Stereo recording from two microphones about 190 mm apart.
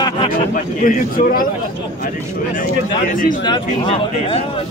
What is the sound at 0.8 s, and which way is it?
Speech, 45° left (ahead or behind).